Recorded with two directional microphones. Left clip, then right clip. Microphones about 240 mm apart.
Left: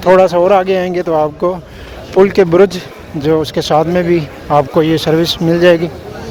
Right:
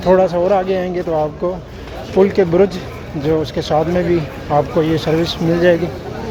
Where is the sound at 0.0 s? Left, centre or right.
Left.